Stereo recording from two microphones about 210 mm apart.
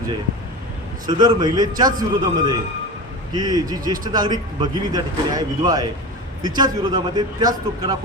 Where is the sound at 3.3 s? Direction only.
20° right (ahead or behind).